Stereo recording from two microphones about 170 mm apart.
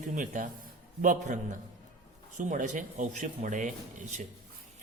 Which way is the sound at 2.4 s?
50° right (ahead or behind).